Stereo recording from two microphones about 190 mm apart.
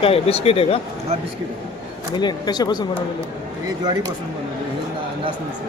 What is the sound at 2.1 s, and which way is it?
Speech, 20° left (ahead or behind).